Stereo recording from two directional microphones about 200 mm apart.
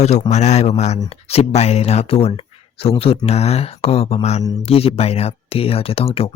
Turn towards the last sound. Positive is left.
turn(degrees=30)  # may be behind; listen again after turning